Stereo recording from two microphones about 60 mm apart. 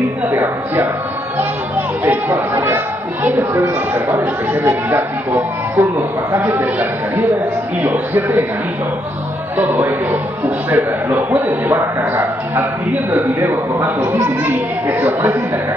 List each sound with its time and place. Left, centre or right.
0.3 s a woman's voice: right
2.0 s a woman's voice: right
3.9 s a woman's voice: right
9.6 s a woman's voice: right